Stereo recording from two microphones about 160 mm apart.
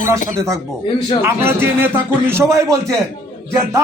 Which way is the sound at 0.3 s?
20° right (ahead or behind).